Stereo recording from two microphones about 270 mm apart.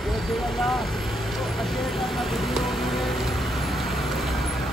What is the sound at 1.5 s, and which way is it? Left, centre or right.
Music, centre.